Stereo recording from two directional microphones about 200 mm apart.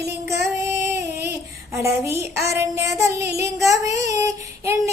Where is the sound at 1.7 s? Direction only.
15° right (ahead or behind).